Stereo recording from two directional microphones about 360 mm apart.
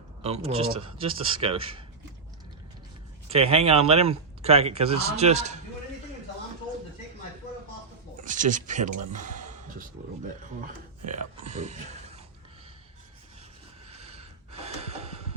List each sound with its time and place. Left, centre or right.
0.2 s speech: centre
3.2 s speech: centre
8.2 s speech: right
9.0 s a sound: right
11.0 s speech: centre
14.1 s gasp: centre